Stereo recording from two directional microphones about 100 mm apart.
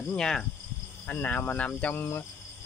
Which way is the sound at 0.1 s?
10° left (ahead or behind).